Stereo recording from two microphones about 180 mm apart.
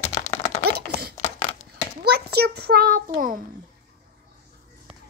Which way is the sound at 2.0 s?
60° right (ahead or behind).